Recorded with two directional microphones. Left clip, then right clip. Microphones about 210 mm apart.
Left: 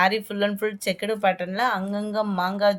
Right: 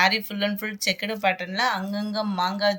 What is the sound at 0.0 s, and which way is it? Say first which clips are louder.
Speech: even; 50° left (ahead or behind).